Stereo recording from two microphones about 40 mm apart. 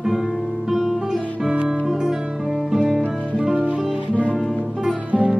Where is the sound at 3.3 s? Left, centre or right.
Right.